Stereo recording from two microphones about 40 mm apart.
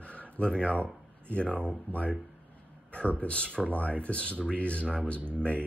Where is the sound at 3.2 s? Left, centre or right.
Left.